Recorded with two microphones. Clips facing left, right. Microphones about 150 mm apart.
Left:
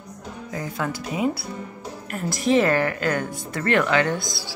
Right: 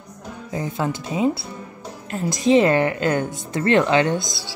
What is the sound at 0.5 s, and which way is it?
A woman's voice, 25° right (ahead or behind).